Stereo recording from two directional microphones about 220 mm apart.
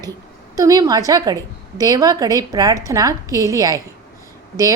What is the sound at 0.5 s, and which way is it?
A woman's voice, 15° right (ahead or behind).